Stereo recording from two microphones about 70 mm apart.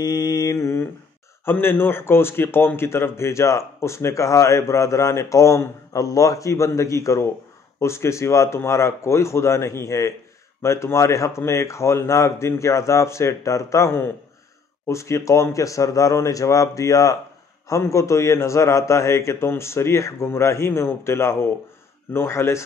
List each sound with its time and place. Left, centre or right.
0.0 s mantra: left
1.4 s speech: left